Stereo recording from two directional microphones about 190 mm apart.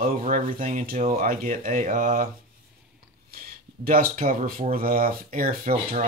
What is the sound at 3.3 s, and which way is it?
Speech, 50° right (ahead or behind).